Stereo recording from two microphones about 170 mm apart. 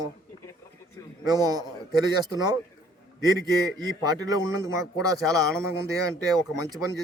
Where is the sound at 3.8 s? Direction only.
25° right (ahead or behind).